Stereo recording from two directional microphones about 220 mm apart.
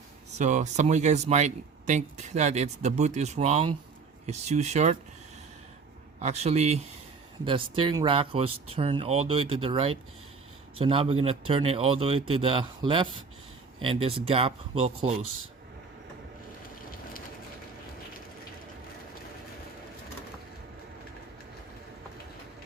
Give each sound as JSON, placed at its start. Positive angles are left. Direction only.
{"t": 0.3, "sound": "speech", "side_deg": -35}
{"t": 6.1, "sound": "speech", "side_deg": -30}